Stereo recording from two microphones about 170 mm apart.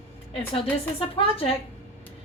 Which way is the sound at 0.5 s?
35° left (ahead or behind).